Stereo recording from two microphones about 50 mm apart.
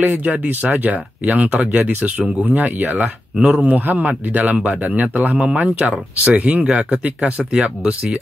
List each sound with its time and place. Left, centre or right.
0.0 s a man's voice: right
6.6 s speech: centre